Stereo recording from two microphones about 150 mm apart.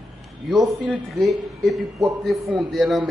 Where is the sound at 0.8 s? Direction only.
Centre (ahead or behind).